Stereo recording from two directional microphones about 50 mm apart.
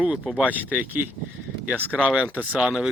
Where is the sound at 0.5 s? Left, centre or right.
Right.